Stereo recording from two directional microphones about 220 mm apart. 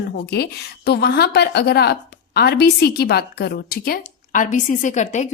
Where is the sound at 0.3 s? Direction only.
50° left (ahead or behind).